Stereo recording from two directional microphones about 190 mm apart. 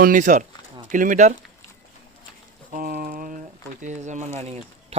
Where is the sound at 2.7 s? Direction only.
50° right (ahead or behind).